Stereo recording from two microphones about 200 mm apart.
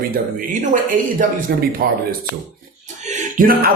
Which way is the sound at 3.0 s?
40° right (ahead or behind).